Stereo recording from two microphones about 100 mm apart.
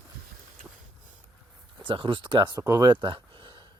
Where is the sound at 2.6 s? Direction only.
35° right (ahead or behind); by 3.7 s 50° right (ahead or behind).